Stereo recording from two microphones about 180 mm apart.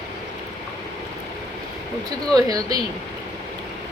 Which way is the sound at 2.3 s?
20° right (ahead or behind).